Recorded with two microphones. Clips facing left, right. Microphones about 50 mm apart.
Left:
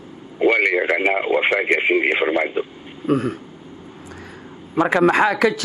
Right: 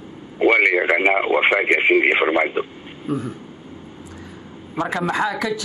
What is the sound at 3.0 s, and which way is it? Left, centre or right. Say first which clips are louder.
Speech: left 6 dB; left.